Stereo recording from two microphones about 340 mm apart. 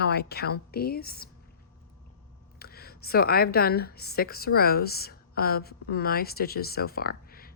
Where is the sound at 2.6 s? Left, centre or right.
Left.